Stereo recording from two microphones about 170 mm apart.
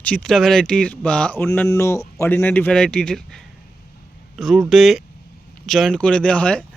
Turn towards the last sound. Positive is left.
turn(degrees=5)  # may be behind; listen again after turning